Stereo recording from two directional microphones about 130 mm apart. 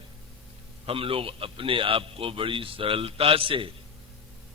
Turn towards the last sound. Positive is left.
turn(degrees=-45)  # may be behind; listen again after turning